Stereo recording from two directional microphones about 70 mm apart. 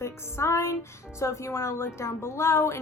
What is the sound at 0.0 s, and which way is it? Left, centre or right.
A woman's voice, left.